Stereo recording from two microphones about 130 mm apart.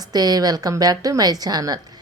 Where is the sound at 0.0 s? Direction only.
30° right (ahead or behind).